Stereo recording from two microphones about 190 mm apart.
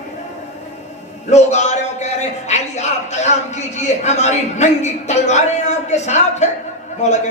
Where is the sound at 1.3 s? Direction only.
35° left (ahead or behind).